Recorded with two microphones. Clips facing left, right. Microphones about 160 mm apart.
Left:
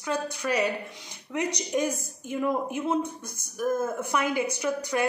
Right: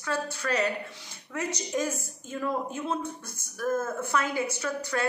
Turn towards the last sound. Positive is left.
turn(degrees=15)  # may be behind; listen again after turning